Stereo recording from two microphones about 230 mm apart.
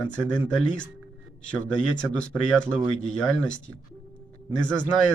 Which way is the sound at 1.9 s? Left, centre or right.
Centre.